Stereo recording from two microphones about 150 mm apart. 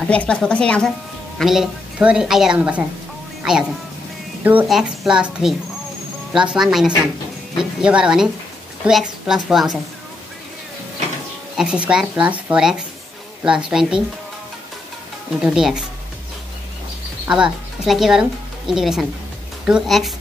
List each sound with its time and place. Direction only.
0.0 s a woman's voice: 5° left (ahead or behind)
11.5 s a woman's voice: 5° right (ahead or behind)
15.4 s a woman's voice: 5° right (ahead or behind)
17.3 s a woman's voice: 5° right (ahead or behind)